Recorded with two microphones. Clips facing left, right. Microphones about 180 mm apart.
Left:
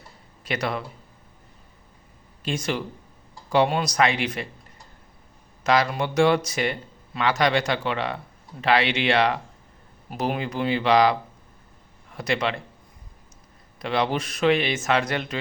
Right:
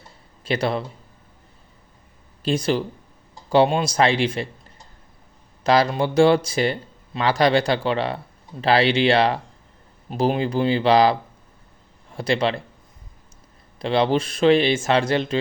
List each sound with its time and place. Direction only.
0.4 s speech: 30° right (ahead or behind)
2.4 s speech: 30° right (ahead or behind)
5.6 s a man's voice: 30° right (ahead or behind)
13.7 s speech: 30° right (ahead or behind)